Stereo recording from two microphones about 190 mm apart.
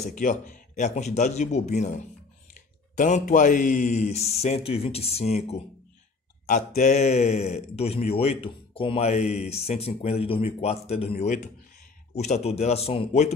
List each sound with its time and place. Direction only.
0.1 s speech: 40° left (ahead or behind)
3.0 s speech: 45° left (ahead or behind)